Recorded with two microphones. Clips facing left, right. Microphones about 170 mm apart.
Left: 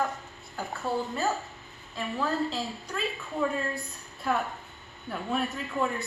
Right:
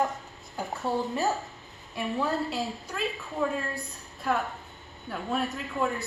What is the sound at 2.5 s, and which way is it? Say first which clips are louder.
Speech: right 1 dB; centre (ahead or behind).